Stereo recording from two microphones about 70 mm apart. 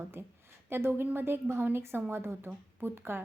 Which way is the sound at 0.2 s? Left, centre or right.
Right.